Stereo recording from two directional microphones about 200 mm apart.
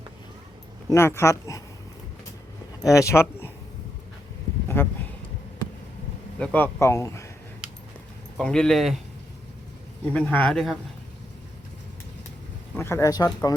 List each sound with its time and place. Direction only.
0.9 s speech: 15° left (ahead or behind)
2.8 s speech: 15° left (ahead or behind)
4.7 s a sound: 10° left (ahead or behind)
6.4 s speech: 10° left (ahead or behind)
8.4 s speech: 5° left (ahead or behind)
10.1 s speech: 5° left (ahead or behind)
12.7 s speech: 10° left (ahead or behind)